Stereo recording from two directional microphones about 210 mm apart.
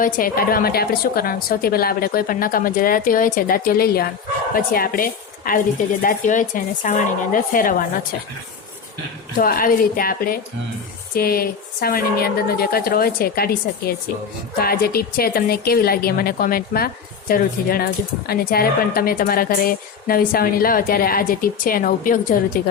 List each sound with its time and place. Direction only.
0.0 s a woman's voice: 45° left (ahead or behind)
9.4 s a woman's voice: 40° left (ahead or behind)